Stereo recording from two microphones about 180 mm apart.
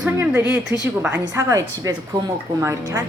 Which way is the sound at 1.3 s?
20° right (ahead or behind).